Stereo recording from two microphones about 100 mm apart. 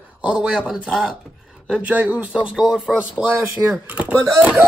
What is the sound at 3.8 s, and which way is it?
Speech, 15° right (ahead or behind).